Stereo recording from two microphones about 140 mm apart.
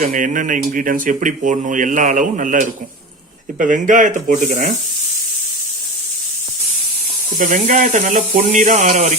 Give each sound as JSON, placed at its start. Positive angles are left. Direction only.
{"t": 0.0, "sound": "speech", "side_deg": -70}
{"t": 7.3, "sound": "speech", "side_deg": -70}